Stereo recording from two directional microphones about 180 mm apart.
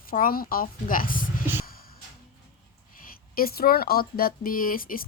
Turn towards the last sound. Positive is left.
turn(degrees=50)  # may be behind; listen again after turning